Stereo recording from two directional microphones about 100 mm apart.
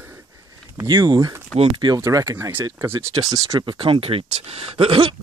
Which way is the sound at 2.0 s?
25° right (ahead or behind).